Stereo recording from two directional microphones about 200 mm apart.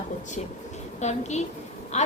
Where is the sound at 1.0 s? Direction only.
35° left (ahead or behind).